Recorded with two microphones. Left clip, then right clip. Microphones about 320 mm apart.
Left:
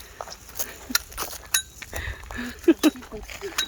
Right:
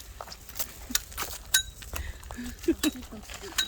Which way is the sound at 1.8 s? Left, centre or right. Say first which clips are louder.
Left 7 dB; centre.